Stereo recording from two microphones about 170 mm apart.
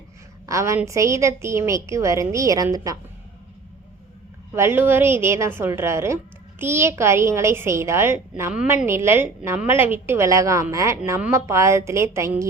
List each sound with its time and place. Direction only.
0.4 s a woman's voice: 15° right (ahead or behind)
4.5 s a woman's voice: 15° right (ahead or behind)